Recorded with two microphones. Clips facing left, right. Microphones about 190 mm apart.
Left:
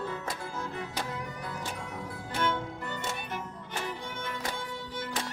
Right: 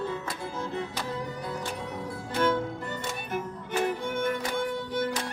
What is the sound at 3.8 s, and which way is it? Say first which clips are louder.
Music: right 10 dB; 55° right (ahead or behind).